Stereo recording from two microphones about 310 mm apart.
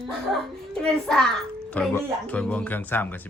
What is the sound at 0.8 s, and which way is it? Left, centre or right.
Speech, centre.